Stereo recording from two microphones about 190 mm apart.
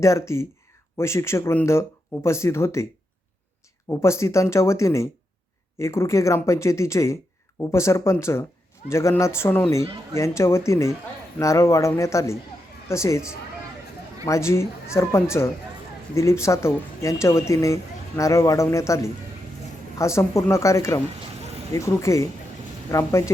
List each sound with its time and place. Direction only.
0.0 s speech: 15° left (ahead or behind)
3.8 s speech: 15° left (ahead or behind)
14.3 s speech: 15° left (ahead or behind)